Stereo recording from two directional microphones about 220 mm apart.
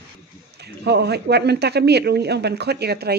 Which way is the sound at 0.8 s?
50° right (ahead or behind).